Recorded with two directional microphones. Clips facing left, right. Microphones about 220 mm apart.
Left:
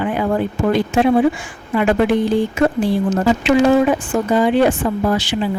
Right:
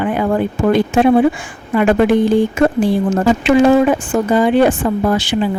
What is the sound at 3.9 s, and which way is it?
Speech, 90° right.